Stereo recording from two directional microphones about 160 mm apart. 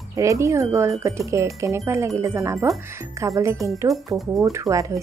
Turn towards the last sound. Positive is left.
turn(degrees=-20)  # may be behind; listen again after turning